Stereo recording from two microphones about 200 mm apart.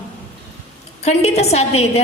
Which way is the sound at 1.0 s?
30° left (ahead or behind).